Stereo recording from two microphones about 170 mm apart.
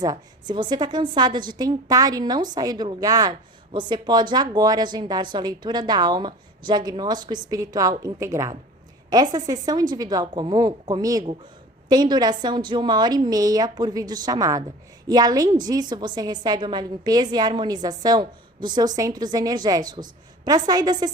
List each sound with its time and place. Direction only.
0.0 s a woman's voice: 25° right (ahead or behind)